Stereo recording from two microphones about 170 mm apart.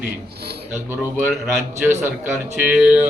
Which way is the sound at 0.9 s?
10° right (ahead or behind).